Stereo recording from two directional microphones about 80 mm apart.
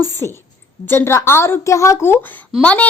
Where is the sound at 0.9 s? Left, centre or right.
Left.